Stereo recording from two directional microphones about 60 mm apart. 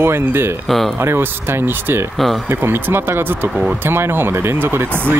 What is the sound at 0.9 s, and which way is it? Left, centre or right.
Speech, right.